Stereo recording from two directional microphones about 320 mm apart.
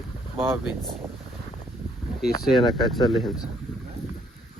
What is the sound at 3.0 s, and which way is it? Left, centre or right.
Speech, centre.